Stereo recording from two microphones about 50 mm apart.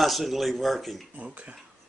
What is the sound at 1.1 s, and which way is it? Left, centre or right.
Speech, right.